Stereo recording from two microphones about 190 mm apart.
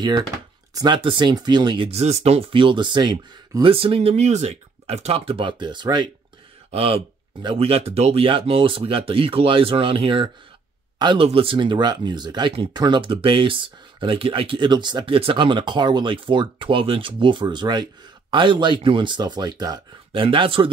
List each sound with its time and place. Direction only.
0.7 s speech: 25° right (ahead or behind)